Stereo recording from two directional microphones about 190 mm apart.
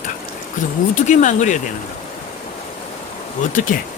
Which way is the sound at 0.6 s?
40° left (ahead or behind).